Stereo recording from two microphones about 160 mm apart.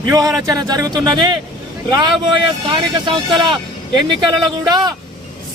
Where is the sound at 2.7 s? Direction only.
30° right (ahead or behind).